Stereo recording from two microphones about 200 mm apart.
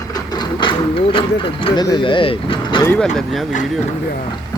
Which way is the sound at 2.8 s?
10° left (ahead or behind).